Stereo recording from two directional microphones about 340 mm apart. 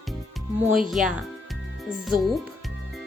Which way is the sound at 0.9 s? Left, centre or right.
Centre.